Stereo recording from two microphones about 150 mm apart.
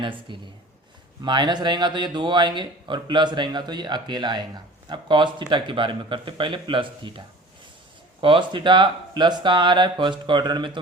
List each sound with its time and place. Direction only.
0.0 s speech: 35° right (ahead or behind)